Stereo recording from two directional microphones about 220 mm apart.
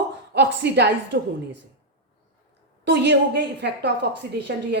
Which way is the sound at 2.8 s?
50° right (ahead or behind).